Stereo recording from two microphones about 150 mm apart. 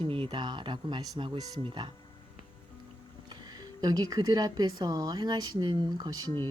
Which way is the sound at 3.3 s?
25° right (ahead or behind).